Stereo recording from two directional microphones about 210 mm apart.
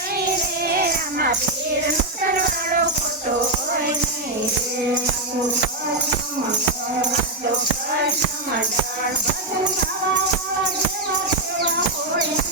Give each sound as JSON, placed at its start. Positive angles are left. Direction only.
{"t": 0.7, "sound": "music", "side_deg": -45}